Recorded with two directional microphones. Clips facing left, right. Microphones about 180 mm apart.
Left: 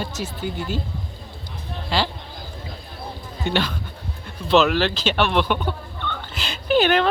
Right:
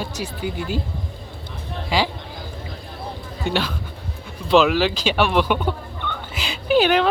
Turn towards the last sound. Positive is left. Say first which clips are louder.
# right 1 dB
turn(degrees=-5)  # may be behind; listen again after turning